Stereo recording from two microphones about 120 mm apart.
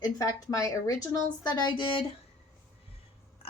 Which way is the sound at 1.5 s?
40° left (ahead or behind).